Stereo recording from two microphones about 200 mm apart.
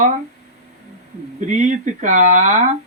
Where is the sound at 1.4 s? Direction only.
40° right (ahead or behind).